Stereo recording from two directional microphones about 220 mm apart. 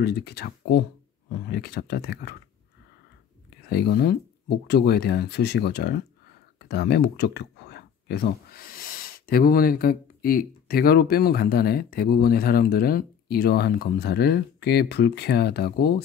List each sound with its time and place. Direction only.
0.0 s speech: 50° left (ahead or behind)
3.4 s speech: 45° left (ahead or behind)